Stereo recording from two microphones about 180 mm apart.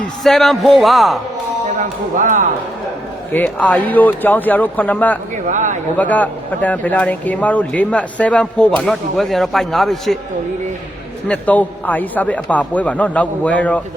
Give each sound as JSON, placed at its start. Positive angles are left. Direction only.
{"t": 0.3, "sound": "speech", "side_deg": 0}
{"t": 1.8, "sound": "speech", "side_deg": -45}
{"t": 3.3, "sound": "speech", "side_deg": 10}
{"t": 5.5, "sound": "speech", "side_deg": -45}
{"t": 6.0, "sound": "speech", "side_deg": 10}
{"t": 11.3, "sound": "speech", "side_deg": 10}